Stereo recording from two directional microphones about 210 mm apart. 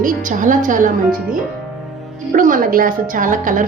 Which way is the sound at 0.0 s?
40° right (ahead or behind).